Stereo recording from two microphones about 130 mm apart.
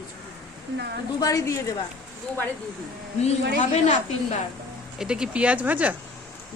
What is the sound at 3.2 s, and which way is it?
A woman's voice, 65° left (ahead or behind).